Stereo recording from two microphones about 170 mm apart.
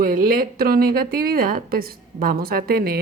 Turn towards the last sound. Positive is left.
turn(degrees=-60)  # may be behind; listen again after turning